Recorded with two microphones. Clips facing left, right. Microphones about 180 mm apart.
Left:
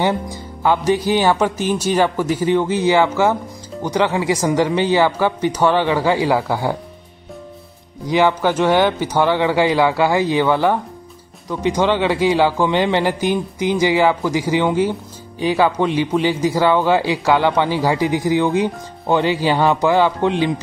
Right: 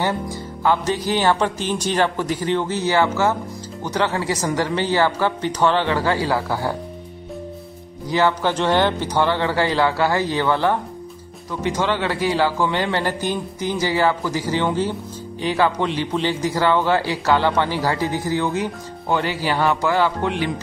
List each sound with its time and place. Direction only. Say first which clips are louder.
0.7 s speech: left 4 dB; 10° left (ahead or behind)
8.1 s speech: left 3 dB; 15° left (ahead or behind)